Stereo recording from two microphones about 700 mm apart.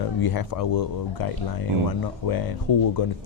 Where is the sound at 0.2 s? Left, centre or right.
Left.